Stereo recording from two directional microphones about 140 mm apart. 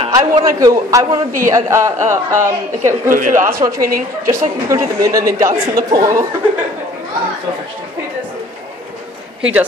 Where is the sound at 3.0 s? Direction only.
70° right (ahead or behind).